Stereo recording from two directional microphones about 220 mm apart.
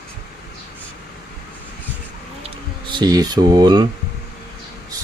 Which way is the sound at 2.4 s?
20° right (ahead or behind).